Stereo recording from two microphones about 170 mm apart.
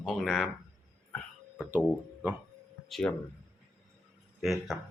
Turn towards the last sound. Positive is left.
turn(degrees=0)  # may be behind; listen again after turning